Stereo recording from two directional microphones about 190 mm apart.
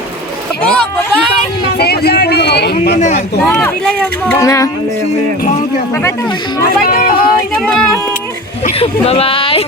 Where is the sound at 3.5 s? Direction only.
5° left (ahead or behind).